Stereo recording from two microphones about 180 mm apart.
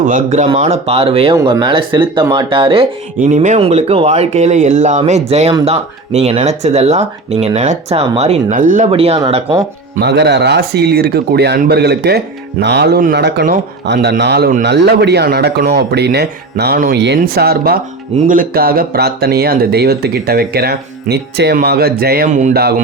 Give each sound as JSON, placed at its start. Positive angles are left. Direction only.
{"t": 0.0, "sound": "speech", "side_deg": -45}
{"t": 3.2, "sound": "speech", "side_deg": -45}
{"t": 8.9, "sound": "speech", "side_deg": -35}
{"t": 10.0, "sound": "a man's voice", "side_deg": -70}